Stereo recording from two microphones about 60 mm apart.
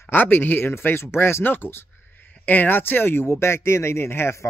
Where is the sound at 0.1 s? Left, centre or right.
Left.